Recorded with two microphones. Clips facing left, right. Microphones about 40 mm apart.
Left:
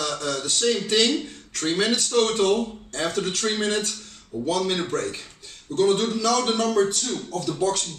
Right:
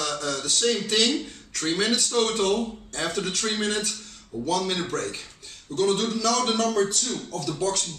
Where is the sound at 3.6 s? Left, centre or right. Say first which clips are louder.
Left 2 dB; centre.